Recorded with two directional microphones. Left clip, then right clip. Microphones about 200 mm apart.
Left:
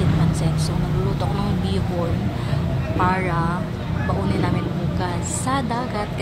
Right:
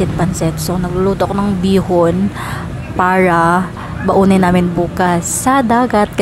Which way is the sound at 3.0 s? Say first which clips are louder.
Right 11 dB; 50° right (ahead or behind).